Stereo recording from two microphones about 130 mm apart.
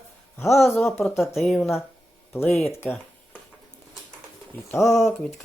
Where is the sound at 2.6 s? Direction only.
15° left (ahead or behind).